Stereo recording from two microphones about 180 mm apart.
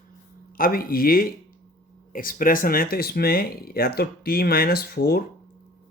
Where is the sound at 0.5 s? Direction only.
55° left (ahead or behind).